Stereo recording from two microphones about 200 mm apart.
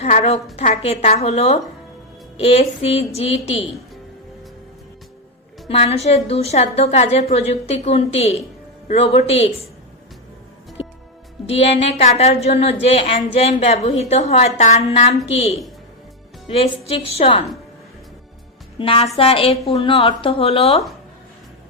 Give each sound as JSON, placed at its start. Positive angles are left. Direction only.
{"t": 0.0, "sound": "a woman's voice", "side_deg": 35}
{"t": 5.6, "sound": "a woman's voice", "side_deg": 30}
{"t": 11.4, "sound": "a woman's voice", "side_deg": 30}
{"t": 17.2, "sound": "speech", "side_deg": 25}
{"t": 18.8, "sound": "speech", "side_deg": 25}